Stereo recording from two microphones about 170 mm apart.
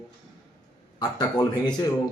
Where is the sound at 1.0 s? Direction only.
25° left (ahead or behind).